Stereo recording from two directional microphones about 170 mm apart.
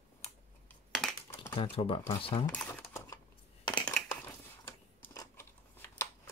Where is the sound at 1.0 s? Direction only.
Centre (ahead or behind).